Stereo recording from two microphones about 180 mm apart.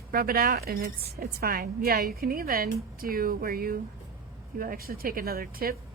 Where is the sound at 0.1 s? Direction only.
55° right (ahead or behind).